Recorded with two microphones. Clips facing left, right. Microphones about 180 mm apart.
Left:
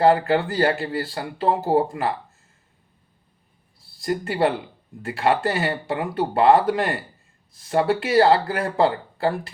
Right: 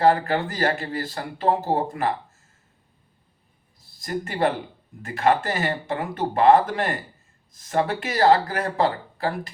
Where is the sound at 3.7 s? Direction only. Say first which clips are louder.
Left 4 dB; 30° left (ahead or behind).